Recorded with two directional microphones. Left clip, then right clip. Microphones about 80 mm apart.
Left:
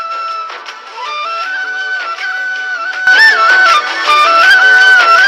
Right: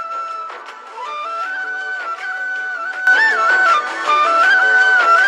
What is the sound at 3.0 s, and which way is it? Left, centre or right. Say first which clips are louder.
Music: left 6 dB; left.